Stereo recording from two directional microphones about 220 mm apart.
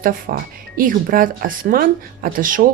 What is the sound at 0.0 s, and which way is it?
Speech, 40° right (ahead or behind).